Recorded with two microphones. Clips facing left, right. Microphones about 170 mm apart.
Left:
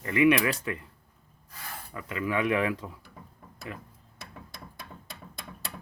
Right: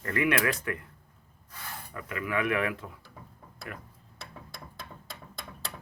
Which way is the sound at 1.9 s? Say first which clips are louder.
Left 3 dB; 20° left (ahead or behind).